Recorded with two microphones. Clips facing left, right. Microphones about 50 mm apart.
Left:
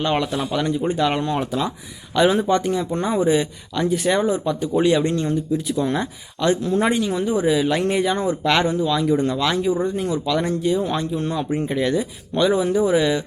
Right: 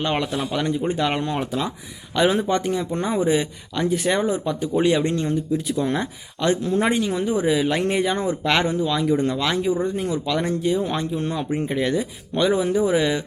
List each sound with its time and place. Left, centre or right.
0.0 s a man's voice: centre